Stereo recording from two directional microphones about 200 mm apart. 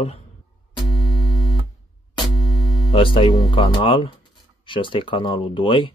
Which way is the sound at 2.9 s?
25° left (ahead or behind).